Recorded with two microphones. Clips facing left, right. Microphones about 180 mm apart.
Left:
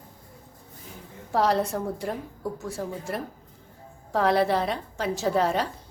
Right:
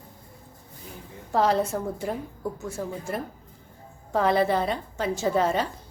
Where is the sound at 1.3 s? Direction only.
Centre (ahead or behind).